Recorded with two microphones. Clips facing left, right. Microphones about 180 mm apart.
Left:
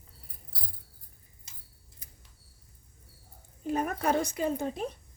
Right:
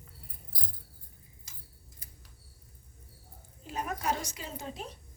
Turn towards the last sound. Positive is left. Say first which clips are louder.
# left 10 dB
turn(degrees=55)  # may be behind; listen again after turning